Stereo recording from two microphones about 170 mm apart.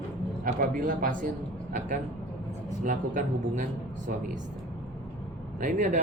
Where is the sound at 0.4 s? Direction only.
55° right (ahead or behind).